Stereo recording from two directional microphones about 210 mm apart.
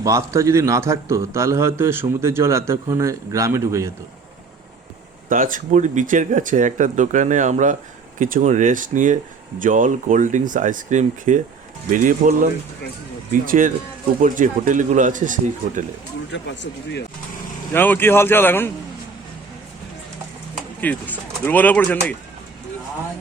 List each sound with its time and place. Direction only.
0.0 s a man's voice: 15° right (ahead or behind)
5.3 s speech: 40° right (ahead or behind)
16.3 s speech: 55° left (ahead or behind)
17.7 s speech: 10° left (ahead or behind)
20.8 s speech: 10° left (ahead or behind)